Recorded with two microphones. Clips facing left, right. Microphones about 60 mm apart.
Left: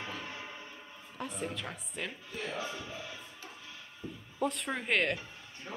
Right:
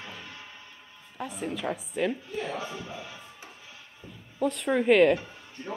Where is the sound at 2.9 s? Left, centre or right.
Centre.